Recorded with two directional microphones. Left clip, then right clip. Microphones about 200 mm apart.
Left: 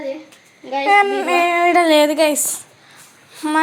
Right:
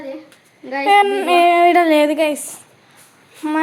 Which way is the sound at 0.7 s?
25° right (ahead or behind).